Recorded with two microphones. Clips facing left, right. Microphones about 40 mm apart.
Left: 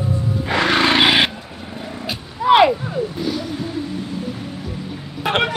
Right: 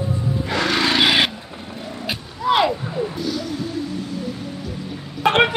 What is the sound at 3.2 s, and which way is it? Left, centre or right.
Music, left.